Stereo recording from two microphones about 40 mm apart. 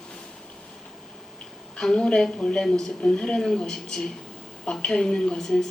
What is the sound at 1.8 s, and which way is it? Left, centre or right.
Speech, centre.